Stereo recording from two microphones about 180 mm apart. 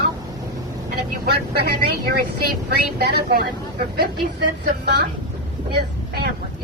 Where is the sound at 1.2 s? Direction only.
60° right (ahead or behind).